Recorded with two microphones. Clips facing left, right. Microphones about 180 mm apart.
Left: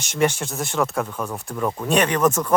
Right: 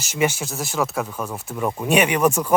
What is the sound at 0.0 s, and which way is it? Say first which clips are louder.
Speech: left 1 dB; 5° right (ahead or behind).